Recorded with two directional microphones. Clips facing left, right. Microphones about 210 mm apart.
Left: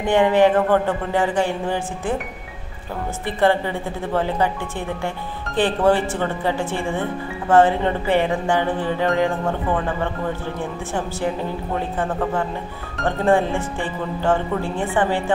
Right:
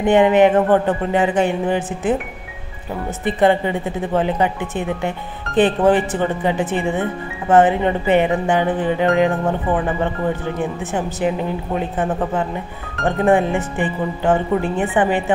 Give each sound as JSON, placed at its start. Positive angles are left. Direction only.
{"t": 0.0, "sound": "speech", "side_deg": -20}
{"t": 3.3, "sound": "speech", "side_deg": -20}
{"t": 10.6, "sound": "speech", "side_deg": -20}